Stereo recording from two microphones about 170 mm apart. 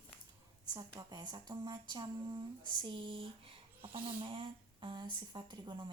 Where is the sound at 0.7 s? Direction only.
25° right (ahead or behind).